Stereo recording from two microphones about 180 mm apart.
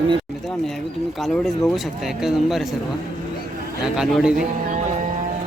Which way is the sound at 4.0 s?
5° right (ahead or behind).